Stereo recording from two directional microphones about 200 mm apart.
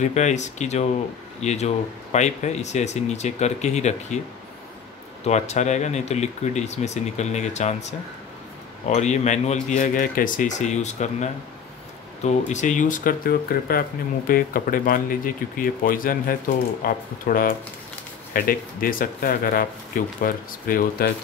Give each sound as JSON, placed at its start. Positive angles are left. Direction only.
{"t": 0.0, "sound": "speech", "side_deg": 35}
{"t": 5.2, "sound": "speech", "side_deg": 35}
{"t": 8.8, "sound": "speech", "side_deg": 35}